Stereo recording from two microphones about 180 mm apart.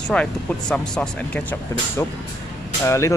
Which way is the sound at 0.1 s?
5° left (ahead or behind).